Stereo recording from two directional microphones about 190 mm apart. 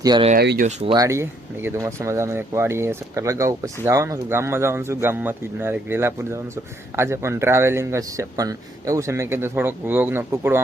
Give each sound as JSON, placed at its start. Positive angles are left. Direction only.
{"t": 0.0, "sound": "speech", "side_deg": -20}
{"t": 0.3, "sound": "speech", "side_deg": -55}
{"t": 0.9, "sound": "speech", "side_deg": -15}